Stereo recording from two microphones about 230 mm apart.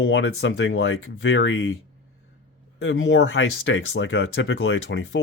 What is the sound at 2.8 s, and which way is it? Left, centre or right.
Speech, left.